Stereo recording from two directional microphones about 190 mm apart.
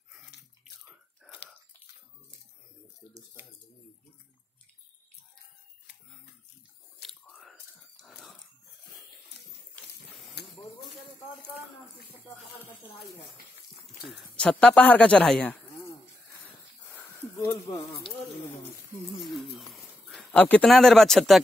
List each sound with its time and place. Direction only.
7.0 s whispering: centre (ahead or behind)
8.0 s dog: centre (ahead or behind)
10.4 s a sound: 60° left (ahead or behind)
12.5 s speech: 10° left (ahead or behind)
14.4 s speech: 5° left (ahead or behind)
16.9 s snake: 10° left (ahead or behind)
19.7 s speech: 5° left (ahead or behind)